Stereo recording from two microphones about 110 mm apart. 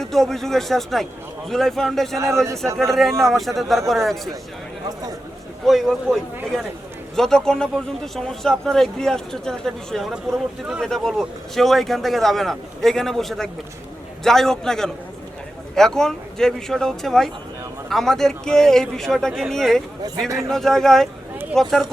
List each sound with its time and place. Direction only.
0.0 s a man's voice: 5° left (ahead or behind)
2.1 s a man's voice: 25° right (ahead or behind)
2.7 s a man's voice: centre (ahead or behind)
5.6 s a man's voice: centre (ahead or behind)
7.2 s a man's voice: 5° left (ahead or behind)